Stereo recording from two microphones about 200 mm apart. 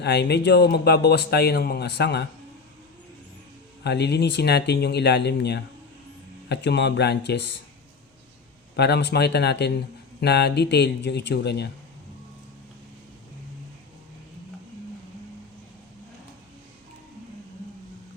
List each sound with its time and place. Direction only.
0.0 s speech: 55° left (ahead or behind)
3.8 s speech: 55° left (ahead or behind)
8.7 s speech: 55° left (ahead or behind)